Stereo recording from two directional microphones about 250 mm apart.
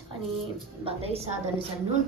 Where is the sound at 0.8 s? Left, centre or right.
Right.